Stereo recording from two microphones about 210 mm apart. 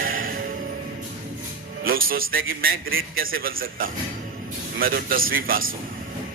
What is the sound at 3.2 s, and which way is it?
A man's voice, 45° right (ahead or behind).